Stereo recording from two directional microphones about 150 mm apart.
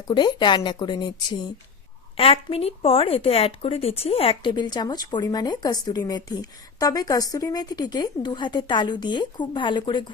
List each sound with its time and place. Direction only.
0.1 s speech: 30° left (ahead or behind)
2.1 s speech: 40° left (ahead or behind)